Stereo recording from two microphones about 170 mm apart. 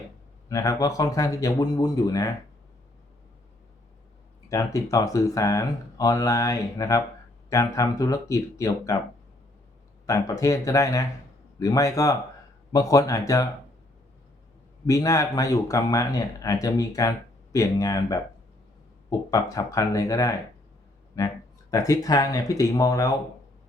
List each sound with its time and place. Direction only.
0.4 s speech: 20° left (ahead or behind)
4.4 s speech: 20° left (ahead or behind)
10.1 s speech: 20° left (ahead or behind)
14.8 s speech: 20° left (ahead or behind)
19.3 s speech: 20° left (ahead or behind)